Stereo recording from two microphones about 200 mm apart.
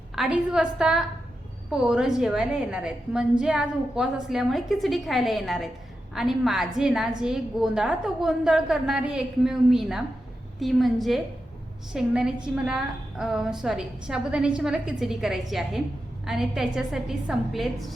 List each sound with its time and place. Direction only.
0.2 s a woman's voice: 5° right (ahead or behind)